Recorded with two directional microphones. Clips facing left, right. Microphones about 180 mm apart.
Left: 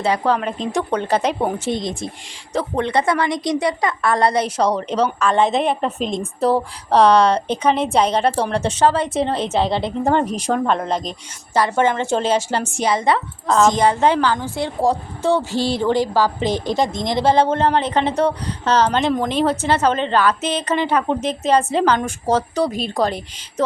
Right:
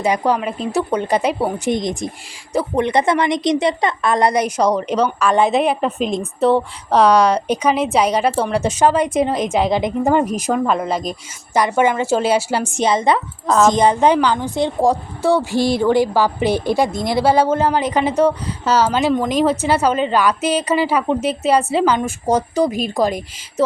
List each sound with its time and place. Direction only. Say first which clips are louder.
0.0 s a woman's voice: right 1 dB; 15° right (ahead or behind)
4.9 s a woman's voice: right 2 dB; 30° left (ahead or behind)
5.3 s a woman's voice: right 3 dB; 10° right (ahead or behind)